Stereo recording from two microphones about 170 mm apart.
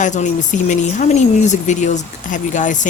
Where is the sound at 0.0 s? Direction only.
45° left (ahead or behind).